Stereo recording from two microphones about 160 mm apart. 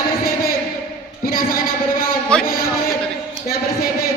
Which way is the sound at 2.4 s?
65° left (ahead or behind).